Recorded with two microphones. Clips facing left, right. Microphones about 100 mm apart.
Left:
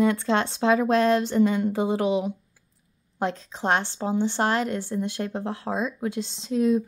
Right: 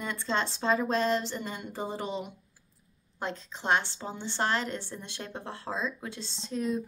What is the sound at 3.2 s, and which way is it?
Speech, 50° left (ahead or behind).